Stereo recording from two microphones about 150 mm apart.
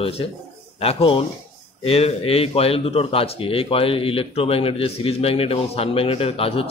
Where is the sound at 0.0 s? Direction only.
40° left (ahead or behind).